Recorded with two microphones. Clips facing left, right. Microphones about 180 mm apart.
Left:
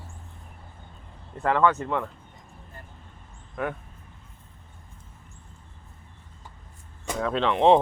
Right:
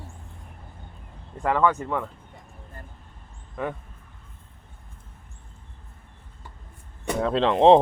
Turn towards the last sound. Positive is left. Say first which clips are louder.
# right 3 dB
turn(degrees=-35)  # may be behind; listen again after turning